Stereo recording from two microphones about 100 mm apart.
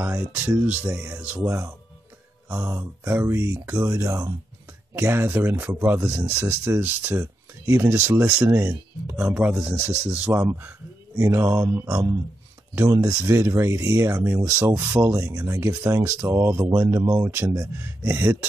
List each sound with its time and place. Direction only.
0.0 s speech: 25° right (ahead or behind)